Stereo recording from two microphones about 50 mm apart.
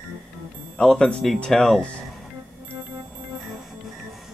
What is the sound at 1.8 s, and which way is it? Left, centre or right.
Speech, centre.